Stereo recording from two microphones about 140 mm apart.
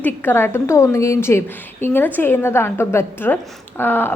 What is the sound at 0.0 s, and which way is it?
A woman's voice, 15° left (ahead or behind).